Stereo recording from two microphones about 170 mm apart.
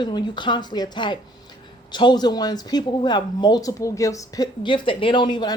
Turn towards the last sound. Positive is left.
turn(degrees=25)  # may be behind; listen again after turning